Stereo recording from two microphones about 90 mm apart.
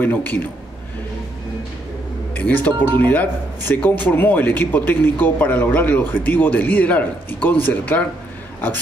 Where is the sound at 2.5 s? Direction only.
20° left (ahead or behind).